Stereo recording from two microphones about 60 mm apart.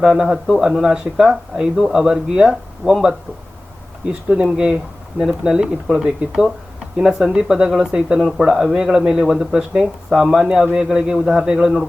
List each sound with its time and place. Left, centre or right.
0.0 s speech: centre
4.1 s speech: centre